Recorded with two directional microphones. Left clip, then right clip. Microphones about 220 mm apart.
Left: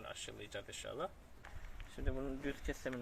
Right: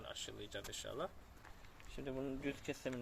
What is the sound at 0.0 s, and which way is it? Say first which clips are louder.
Speech: even; 10° left (ahead or behind).